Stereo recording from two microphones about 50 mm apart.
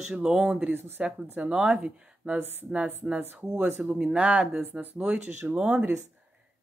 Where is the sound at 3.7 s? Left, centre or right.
Right.